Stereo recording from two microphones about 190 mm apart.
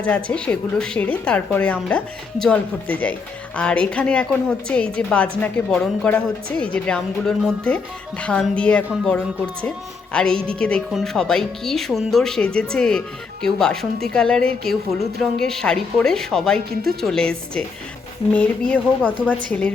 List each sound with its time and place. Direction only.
0.0 s a woman's voice: 5° left (ahead or behind)